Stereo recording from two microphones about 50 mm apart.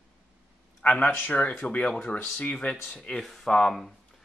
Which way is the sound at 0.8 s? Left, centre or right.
Left.